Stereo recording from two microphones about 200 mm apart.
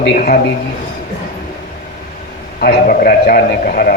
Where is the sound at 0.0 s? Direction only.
45° left (ahead or behind).